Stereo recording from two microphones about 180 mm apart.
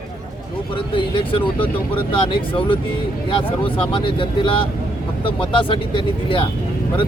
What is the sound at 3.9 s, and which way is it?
Speech, 30° left (ahead or behind).